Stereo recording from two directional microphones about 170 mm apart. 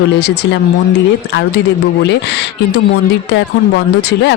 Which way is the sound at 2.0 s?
90° left.